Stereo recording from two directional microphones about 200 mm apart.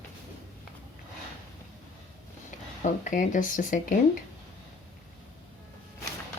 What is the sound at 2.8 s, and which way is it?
Speech, 40° left (ahead or behind).